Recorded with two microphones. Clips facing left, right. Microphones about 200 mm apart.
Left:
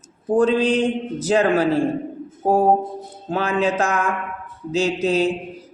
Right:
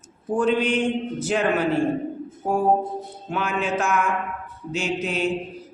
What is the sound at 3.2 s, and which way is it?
Speech, 35° left (ahead or behind).